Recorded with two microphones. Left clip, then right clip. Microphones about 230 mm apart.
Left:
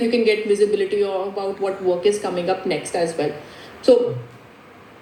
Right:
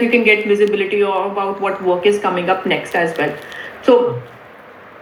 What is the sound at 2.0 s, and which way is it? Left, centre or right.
Speech, centre.